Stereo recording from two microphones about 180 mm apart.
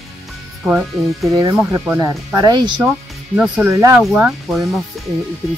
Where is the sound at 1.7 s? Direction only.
15° right (ahead or behind).